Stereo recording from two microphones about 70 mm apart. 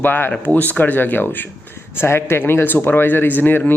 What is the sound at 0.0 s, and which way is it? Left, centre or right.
Speech, left.